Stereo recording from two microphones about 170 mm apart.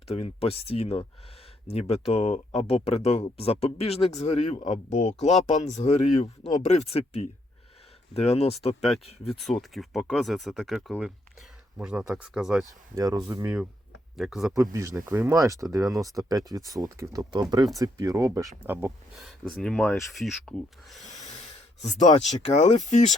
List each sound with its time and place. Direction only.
0.1 s speech: 35° left (ahead or behind)
9.3 s speech: centre (ahead or behind)
12.6 s speech: 20° right (ahead or behind)
14.2 s speech: centre (ahead or behind)
14.5 s speech: 20° right (ahead or behind)
19.2 s speech: centre (ahead or behind)
21.0 s snort: 45° left (ahead or behind)
22.1 s speech: 40° left (ahead or behind)